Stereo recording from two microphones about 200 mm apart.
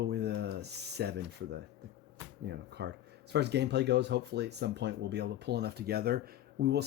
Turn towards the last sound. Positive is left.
turn(degrees=-55)  # may be behind; listen again after turning